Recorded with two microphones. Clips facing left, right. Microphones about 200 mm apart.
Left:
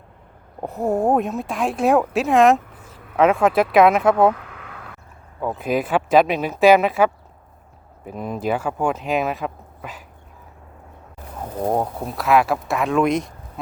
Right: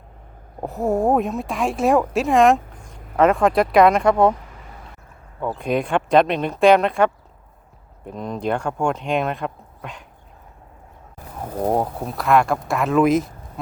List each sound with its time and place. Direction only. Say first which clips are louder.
0.6 s speech: even; centre (ahead or behind)
4.4 s a sound: left 3 dB; 75° left (ahead or behind)
5.4 s speech: even; 5° left (ahead or behind)
11.6 s speech: right 1 dB; 5° right (ahead or behind)